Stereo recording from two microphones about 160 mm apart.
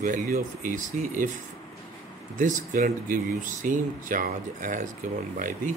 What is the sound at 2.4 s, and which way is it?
Speech, 55° right (ahead or behind).